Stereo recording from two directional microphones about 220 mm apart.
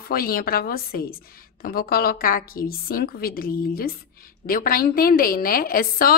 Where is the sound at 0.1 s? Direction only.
40° left (ahead or behind).